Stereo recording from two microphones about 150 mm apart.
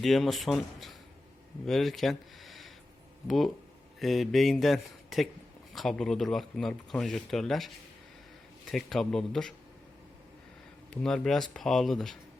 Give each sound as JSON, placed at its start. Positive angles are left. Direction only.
{"t": 0.0, "sound": "speech", "side_deg": 0}
{"t": 8.7, "sound": "speech", "side_deg": 0}
{"t": 11.0, "sound": "speech", "side_deg": 5}